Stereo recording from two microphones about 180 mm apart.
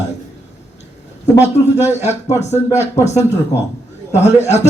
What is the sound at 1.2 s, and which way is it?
Speech, 15° left (ahead or behind).